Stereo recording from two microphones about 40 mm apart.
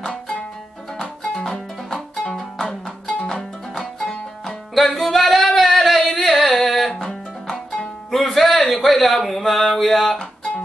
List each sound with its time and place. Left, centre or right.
1.2 s music: centre
2.0 s music: centre
4.7 s singing: centre
6.9 s music: centre
8.1 s music: centre